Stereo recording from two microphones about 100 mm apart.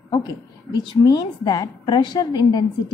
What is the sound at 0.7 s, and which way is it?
A woman's voice, 45° left (ahead or behind).